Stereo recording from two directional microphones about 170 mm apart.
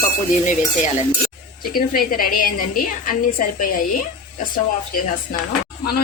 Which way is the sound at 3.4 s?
55° left (ahead or behind).